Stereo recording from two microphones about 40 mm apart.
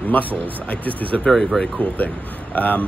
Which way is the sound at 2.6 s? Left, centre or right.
Left.